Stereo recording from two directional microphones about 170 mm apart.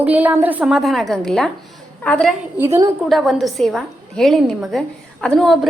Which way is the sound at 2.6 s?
15° right (ahead or behind).